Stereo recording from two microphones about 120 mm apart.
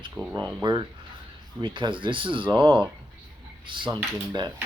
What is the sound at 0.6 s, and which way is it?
Speech, 35° right (ahead or behind).